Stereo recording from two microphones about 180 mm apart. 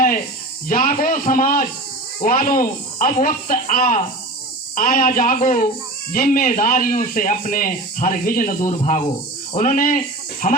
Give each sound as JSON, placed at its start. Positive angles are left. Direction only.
{"t": 0.7, "sound": "speech", "side_deg": 50}